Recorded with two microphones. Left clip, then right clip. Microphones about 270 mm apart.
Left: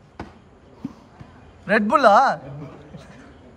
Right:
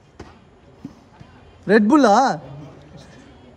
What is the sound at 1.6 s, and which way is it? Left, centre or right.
Speech, right.